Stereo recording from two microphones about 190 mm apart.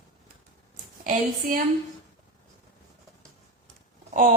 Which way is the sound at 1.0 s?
45° right (ahead or behind).